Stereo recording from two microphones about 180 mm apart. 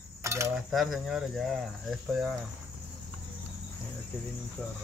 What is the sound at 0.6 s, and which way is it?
Speech, centre (ahead or behind).